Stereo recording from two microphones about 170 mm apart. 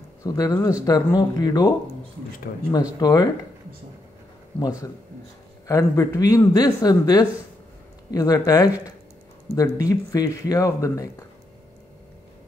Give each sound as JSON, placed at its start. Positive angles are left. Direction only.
{"t": 0.2, "sound": "speech", "side_deg": 20}
{"t": 2.7, "sound": "speech", "side_deg": 25}
{"t": 4.6, "sound": "speech", "side_deg": 20}